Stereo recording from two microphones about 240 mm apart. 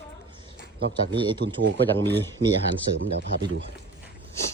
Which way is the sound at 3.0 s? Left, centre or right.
Right.